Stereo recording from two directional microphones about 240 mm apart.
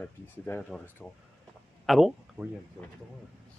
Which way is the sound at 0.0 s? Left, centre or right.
Centre.